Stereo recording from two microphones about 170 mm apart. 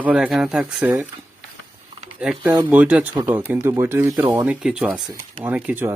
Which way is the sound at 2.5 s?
20° right (ahead or behind).